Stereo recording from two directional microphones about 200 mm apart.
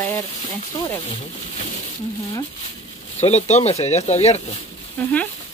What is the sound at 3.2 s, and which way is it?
Speech, 35° left (ahead or behind).